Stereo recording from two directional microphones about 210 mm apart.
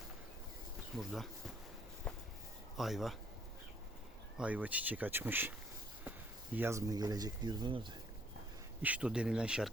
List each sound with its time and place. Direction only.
0.9 s speech: centre (ahead or behind)
2.1 s a sound: 5° left (ahead or behind)
2.7 s speech: centre (ahead or behind)
4.4 s speech: 5° right (ahead or behind)
8.8 s speech: 5° right (ahead or behind)